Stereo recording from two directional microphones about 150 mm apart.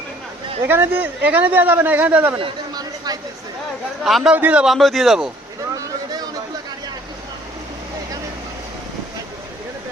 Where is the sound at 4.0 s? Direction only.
Centre (ahead or behind).